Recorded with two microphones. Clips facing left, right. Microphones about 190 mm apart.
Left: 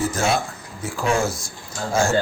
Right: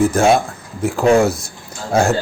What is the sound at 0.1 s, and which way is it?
Speech, 55° right (ahead or behind).